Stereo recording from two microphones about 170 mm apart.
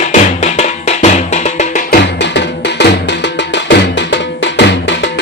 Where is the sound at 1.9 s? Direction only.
90° left.